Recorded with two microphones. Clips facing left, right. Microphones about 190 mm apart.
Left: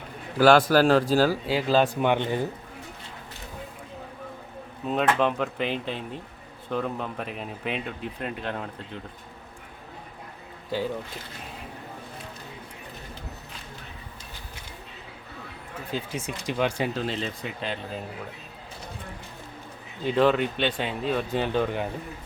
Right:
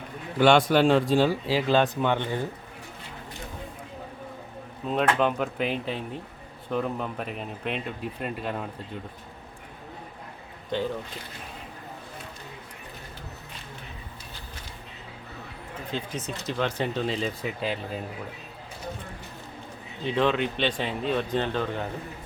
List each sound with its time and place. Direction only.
0.3 s a man's voice: centre (ahead or behind)
5.1 s a man's voice: 5° right (ahead or behind)
10.7 s speech: 5° left (ahead or behind)
15.9 s speech: 10° left (ahead or behind)
16.9 s a man's voice: centre (ahead or behind)
20.1 s a man's voice: 5° left (ahead or behind)